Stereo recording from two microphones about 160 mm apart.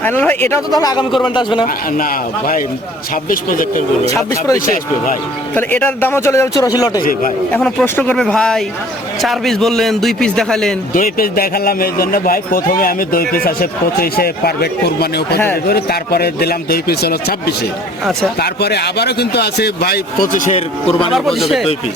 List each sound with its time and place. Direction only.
0.0 s speech: 10° left (ahead or behind)
0.7 s a man's voice: 25° left (ahead or behind)
1.6 s speech: 60° left (ahead or behind)
4.1 s a man's voice: 20° left (ahead or behind)
4.5 s speech: 60° left (ahead or behind)
5.5 s speech: 10° left (ahead or behind)
7.5 s a man's voice: 10° left (ahead or behind)
10.9 s speech: 65° left (ahead or behind)
21.1 s a man's voice: centre (ahead or behind)